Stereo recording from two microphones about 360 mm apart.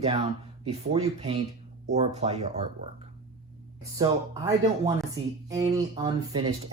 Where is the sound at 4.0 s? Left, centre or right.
Centre.